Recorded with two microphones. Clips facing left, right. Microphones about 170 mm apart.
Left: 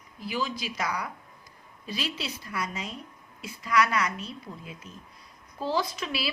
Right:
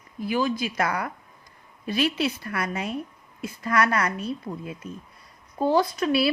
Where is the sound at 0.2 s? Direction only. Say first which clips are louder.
Right 7 dB; 55° right (ahead or behind).